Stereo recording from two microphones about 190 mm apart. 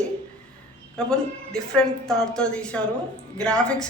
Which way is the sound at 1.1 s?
5° left (ahead or behind).